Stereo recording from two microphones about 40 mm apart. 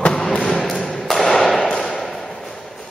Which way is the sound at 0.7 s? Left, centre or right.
Centre.